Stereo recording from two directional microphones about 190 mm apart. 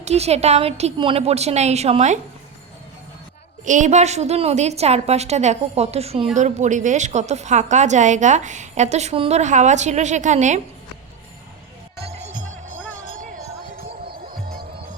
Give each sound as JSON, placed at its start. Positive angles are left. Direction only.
{"t": 0.0, "sound": "a woman's voice", "side_deg": -35}
{"t": 3.6, "sound": "a woman's voice", "side_deg": -40}
{"t": 14.3, "sound": "music", "side_deg": -50}